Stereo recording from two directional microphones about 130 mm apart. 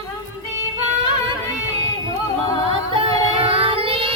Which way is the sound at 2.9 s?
45° right (ahead or behind).